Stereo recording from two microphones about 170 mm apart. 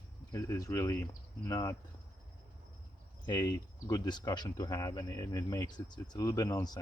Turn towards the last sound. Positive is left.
turn(degrees=20)  # may be behind; listen again after turning